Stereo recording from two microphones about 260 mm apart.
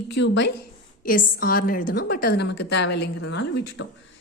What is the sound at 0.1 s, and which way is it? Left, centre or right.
A woman's voice, left.